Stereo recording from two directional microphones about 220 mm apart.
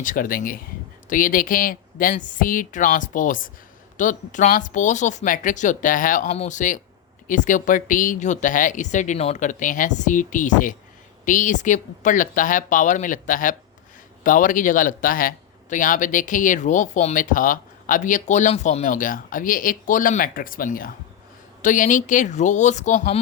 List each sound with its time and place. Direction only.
0.0 s speech: 40° left (ahead or behind)